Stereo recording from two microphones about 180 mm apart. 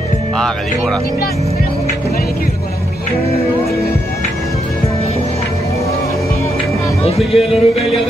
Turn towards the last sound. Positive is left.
turn(degrees=0)  # may be behind; listen again after turning